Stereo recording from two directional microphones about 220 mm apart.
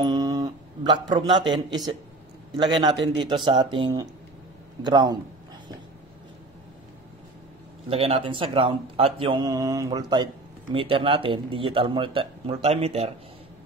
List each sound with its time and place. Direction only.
0.0 s a sound: 20° right (ahead or behind)
2.5 s speech: 20° right (ahead or behind)
7.9 s speech: 25° right (ahead or behind)